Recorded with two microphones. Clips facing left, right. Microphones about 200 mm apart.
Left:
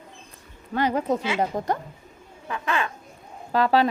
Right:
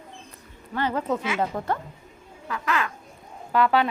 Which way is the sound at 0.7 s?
15° left (ahead or behind).